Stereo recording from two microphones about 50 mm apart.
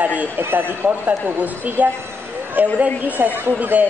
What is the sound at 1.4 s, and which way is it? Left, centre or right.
A woman's voice, right.